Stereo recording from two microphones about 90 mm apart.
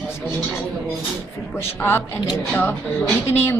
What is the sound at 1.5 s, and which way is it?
Speech, 25° left (ahead or behind).